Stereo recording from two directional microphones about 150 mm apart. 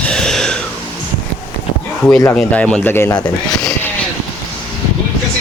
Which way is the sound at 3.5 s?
Centre (ahead or behind).